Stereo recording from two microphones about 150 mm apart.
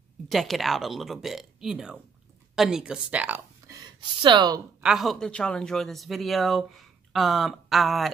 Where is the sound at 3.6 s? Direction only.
25° right (ahead or behind).